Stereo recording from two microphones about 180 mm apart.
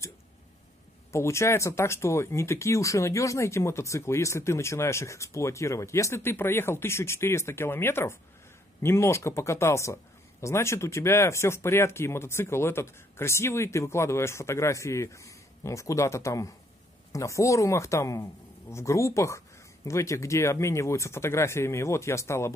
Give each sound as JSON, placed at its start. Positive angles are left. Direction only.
{"t": 1.1, "sound": "speech", "side_deg": 15}